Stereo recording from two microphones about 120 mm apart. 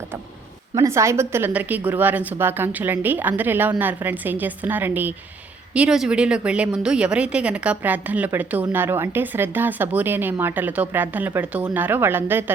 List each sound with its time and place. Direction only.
0.8 s a woman's voice: 25° right (ahead or behind)